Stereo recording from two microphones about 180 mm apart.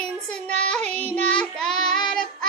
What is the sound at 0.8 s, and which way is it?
Child singing, 35° right (ahead or behind).